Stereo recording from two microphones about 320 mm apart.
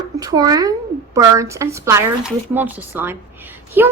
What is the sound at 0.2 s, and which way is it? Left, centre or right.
A woman's voice, centre.